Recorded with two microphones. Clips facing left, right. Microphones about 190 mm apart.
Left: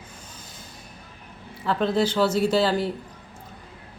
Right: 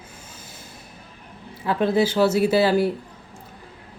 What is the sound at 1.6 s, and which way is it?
A woman's voice, 5° right (ahead or behind).